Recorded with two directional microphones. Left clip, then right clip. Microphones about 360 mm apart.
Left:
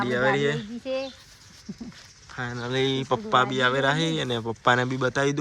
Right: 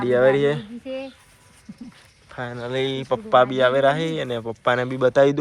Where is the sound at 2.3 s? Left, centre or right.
Centre.